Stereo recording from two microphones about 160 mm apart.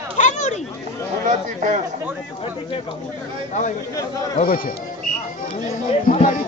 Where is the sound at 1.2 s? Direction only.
55° right (ahead or behind).